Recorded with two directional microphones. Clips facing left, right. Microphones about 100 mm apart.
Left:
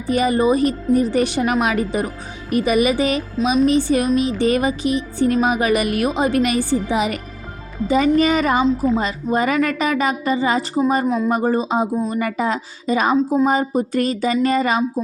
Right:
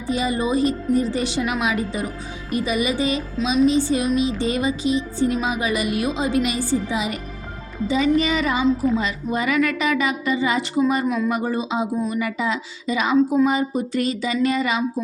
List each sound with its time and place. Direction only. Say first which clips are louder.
0.1 s music: left 5 dB; 55° left (ahead or behind)
7.9 s a woman's voice: left 4 dB; 50° left (ahead or behind)